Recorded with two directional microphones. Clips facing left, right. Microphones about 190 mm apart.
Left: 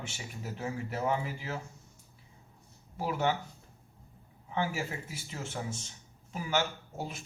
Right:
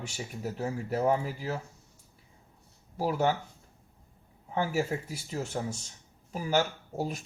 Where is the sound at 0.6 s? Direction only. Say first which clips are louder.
Right 5 dB; 40° right (ahead or behind).